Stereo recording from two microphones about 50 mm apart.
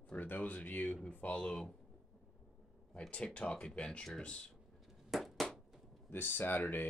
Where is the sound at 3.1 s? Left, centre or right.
Left.